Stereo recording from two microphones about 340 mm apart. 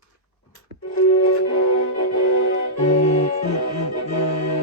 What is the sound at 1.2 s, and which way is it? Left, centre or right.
Music, left.